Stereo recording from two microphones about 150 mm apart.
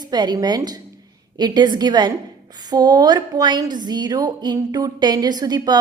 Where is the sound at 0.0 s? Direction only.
30° right (ahead or behind).